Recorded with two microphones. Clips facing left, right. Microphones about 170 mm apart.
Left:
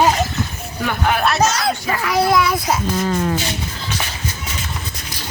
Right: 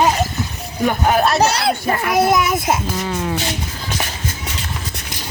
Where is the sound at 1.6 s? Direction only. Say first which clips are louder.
Right 2 dB; 65° right (ahead or behind).